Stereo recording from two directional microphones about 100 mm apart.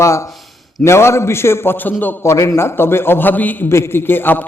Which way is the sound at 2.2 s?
30° left (ahead or behind).